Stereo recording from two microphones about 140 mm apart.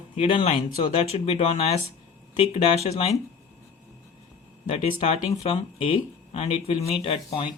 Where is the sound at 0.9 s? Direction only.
50° left (ahead or behind).